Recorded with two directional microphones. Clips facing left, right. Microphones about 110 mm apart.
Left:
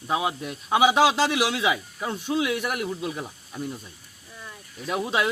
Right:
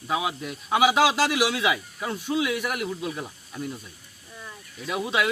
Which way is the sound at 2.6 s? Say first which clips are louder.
Left 1 dB; 20° left (ahead or behind).